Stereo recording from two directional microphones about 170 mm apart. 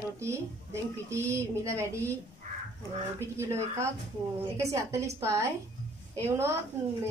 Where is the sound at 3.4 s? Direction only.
15° right (ahead or behind).